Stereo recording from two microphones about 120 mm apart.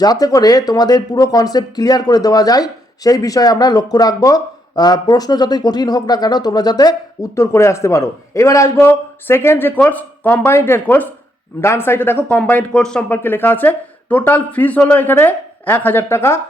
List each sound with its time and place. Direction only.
0.0 s speech: 30° left (ahead or behind)